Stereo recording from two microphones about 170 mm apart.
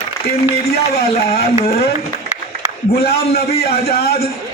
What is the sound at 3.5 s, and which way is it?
Speech, 35° left (ahead or behind).